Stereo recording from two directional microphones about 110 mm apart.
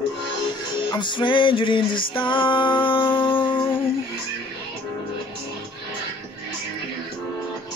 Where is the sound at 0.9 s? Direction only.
45° left (ahead or behind).